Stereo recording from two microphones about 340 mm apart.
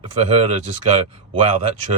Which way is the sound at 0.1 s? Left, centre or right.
Centre.